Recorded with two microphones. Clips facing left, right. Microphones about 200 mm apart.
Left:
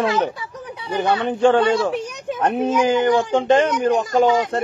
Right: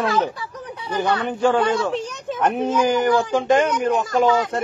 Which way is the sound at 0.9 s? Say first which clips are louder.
Left 2 dB; 20° left (ahead or behind).